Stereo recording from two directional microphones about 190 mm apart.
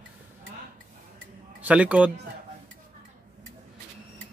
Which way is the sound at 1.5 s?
5° right (ahead or behind).